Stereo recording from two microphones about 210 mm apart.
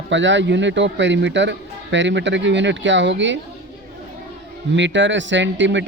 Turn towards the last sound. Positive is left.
turn(degrees=-60)  # may be behind; listen again after turning